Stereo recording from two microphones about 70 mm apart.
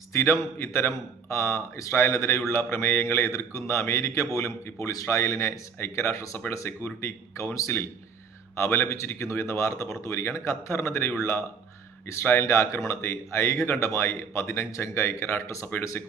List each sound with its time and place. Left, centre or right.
0.1 s speech: left